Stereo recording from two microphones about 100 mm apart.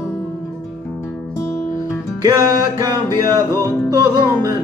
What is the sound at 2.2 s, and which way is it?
Music, 40° right (ahead or behind).